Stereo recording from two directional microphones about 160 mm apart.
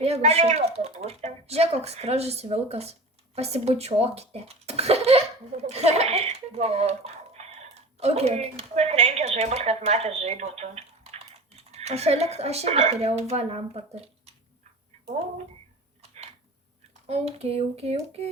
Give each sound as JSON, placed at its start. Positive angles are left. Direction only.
{"t": 0.0, "sound": "speech", "side_deg": -40}
{"t": 16.0, "sound": "a sound", "side_deg": -40}
{"t": 17.1, "sound": "speech", "side_deg": -40}